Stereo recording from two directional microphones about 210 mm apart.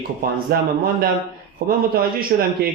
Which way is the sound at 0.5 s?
45° right (ahead or behind).